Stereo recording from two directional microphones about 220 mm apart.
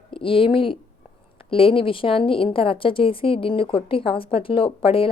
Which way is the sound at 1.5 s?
25° left (ahead or behind).